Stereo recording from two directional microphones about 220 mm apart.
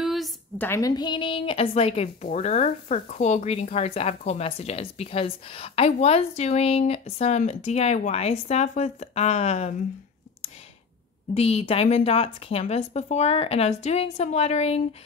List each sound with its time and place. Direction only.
0.0 s a sound: centre (ahead or behind)
0.7 s speech: 15° left (ahead or behind)
11.3 s speech: 30° left (ahead or behind)